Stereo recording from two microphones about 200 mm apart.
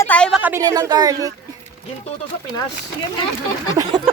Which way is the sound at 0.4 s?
15° right (ahead or behind).